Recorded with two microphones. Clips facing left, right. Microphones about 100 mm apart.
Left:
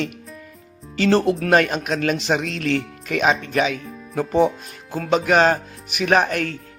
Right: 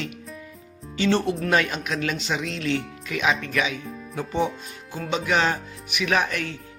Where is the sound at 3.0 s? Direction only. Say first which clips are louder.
Left 5 dB; 50° left (ahead or behind).